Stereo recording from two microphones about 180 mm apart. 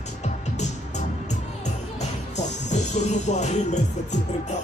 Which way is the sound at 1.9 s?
40° left (ahead or behind).